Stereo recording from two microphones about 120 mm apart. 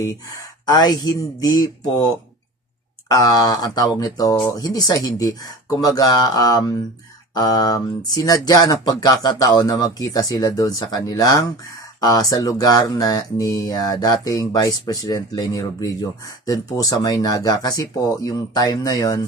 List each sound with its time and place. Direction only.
0.0 s speech: 25° left (ahead or behind)
3.1 s speech: 30° left (ahead or behind)